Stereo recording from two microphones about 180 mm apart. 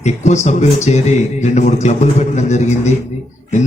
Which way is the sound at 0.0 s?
40° left (ahead or behind).